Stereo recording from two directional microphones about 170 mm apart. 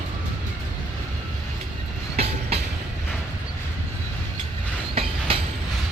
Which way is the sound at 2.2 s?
35° right (ahead or behind).